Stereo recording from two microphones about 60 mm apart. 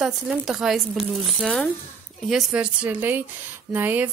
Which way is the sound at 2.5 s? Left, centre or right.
Right.